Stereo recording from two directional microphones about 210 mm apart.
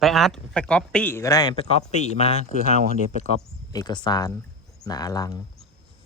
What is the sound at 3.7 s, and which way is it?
Speech, 20° left (ahead or behind).